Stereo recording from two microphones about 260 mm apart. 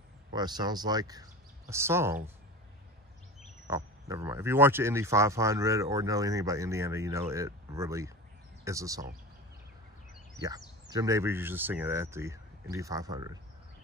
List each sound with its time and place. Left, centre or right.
0.3 s speech: centre
3.6 s speech: centre
10.4 s speech: centre